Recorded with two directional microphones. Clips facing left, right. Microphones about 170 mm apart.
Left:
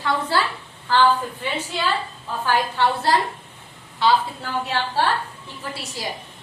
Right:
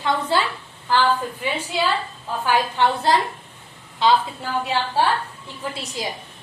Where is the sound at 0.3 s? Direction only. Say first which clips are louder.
Right 1 dB; 20° right (ahead or behind).